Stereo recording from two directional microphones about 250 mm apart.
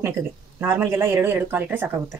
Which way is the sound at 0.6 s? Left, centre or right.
Centre.